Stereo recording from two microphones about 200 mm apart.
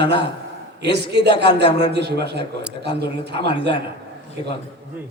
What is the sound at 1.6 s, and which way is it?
Speech, 25° left (ahead or behind).